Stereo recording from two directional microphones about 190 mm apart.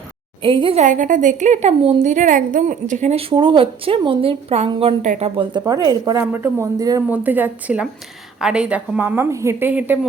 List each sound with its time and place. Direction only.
0.4 s a woman's voice: 25° right (ahead or behind); by 10.1 s 10° right (ahead or behind)